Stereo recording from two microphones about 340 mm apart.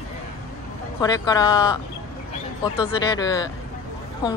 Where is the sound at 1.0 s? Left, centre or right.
Centre.